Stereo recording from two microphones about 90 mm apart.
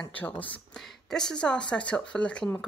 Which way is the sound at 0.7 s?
5° left (ahead or behind).